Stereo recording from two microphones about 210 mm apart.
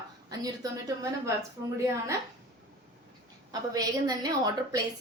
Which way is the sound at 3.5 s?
20° right (ahead or behind).